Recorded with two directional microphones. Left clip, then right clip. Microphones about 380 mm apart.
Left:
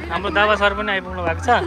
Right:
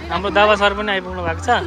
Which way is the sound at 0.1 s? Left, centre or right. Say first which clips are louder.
Right 3 dB; centre.